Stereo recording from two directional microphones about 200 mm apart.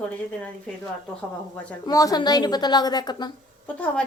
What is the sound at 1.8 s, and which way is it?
A woman's voice, 15° left (ahead or behind).